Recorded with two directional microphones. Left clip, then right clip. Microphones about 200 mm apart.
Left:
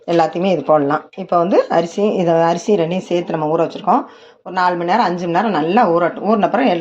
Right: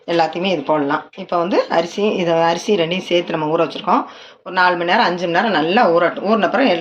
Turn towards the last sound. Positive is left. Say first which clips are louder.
# even
turn(degrees=40)  # may be behind; listen again after turning